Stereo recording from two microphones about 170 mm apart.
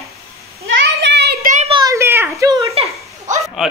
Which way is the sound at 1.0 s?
85° right.